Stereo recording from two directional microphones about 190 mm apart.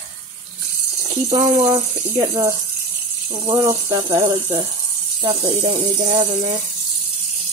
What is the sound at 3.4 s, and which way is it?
Speech, 20° right (ahead or behind).